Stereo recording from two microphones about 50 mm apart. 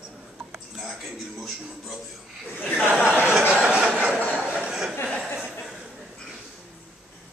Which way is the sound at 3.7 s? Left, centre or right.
Right.